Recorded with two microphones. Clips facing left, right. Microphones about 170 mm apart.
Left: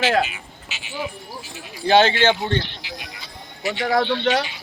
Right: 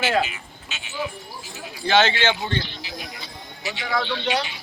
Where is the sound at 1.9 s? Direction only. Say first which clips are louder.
Left 4 dB; 40° left (ahead or behind).